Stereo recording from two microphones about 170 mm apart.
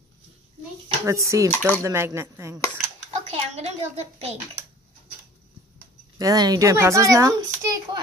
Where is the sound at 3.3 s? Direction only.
40° right (ahead or behind).